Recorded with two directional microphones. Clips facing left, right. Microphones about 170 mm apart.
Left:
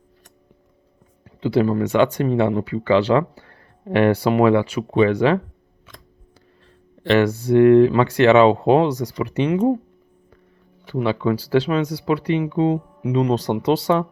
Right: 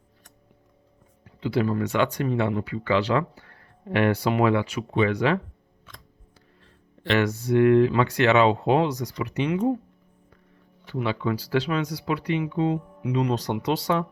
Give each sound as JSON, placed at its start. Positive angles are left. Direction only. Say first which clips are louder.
{"t": 1.2, "sound": "speech", "louder": "left 6 dB", "side_deg": 30}
{"t": 7.0, "sound": "speech", "louder": "left 6 dB", "side_deg": 30}
{"t": 10.9, "sound": "speech", "louder": "left 6 dB", "side_deg": 35}